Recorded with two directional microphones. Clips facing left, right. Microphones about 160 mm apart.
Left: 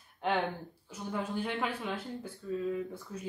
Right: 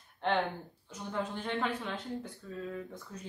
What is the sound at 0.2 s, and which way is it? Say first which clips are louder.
Speech: even; 5° left (ahead or behind).